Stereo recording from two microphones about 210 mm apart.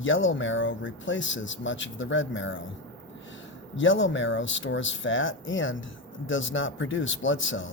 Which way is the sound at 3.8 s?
65° left (ahead or behind).